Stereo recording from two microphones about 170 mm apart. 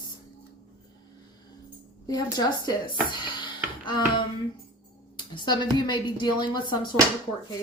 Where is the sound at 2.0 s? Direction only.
20° left (ahead or behind).